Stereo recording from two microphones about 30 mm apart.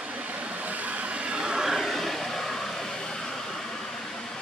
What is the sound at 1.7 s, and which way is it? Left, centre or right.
Vehicle, centre.